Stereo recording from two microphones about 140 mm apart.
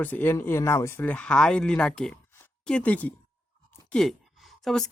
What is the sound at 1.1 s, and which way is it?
Speech, 5° left (ahead or behind).